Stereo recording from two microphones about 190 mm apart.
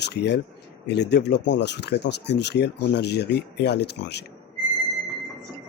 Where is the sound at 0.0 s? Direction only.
60° left (ahead or behind).